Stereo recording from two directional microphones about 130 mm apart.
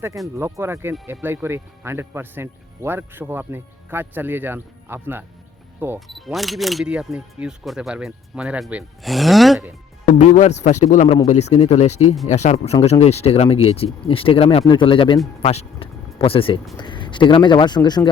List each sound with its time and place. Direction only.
0.3 s speech: 20° right (ahead or behind)
6.1 s speech: centre (ahead or behind)
10.2 s a man's voice: 65° left (ahead or behind); by 18.1 s 35° left (ahead or behind)